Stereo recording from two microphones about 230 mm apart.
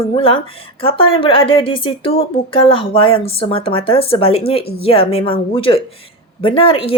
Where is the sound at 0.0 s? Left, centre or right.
Left.